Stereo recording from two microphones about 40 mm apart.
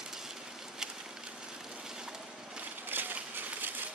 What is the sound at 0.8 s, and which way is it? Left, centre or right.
Vehicle, centre.